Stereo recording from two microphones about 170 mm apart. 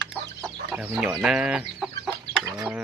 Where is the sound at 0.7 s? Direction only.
5° right (ahead or behind).